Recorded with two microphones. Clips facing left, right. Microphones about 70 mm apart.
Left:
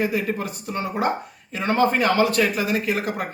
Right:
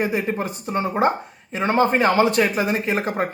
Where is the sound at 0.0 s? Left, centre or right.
Right.